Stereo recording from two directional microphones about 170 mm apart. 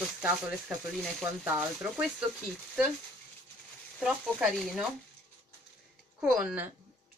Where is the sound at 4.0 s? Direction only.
5° right (ahead or behind).